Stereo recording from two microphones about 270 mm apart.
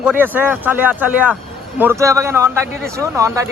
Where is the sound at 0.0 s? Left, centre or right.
Centre.